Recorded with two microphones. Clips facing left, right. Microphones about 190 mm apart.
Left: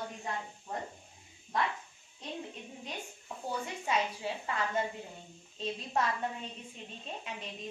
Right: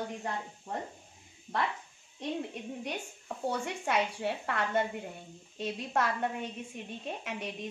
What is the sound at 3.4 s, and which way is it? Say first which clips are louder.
A woman's voice: right 3 dB; 70° right (ahead or behind).